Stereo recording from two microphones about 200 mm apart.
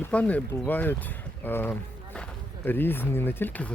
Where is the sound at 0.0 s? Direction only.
5° left (ahead or behind).